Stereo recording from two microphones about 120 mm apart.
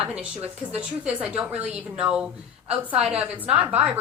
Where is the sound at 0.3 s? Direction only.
60° right (ahead or behind).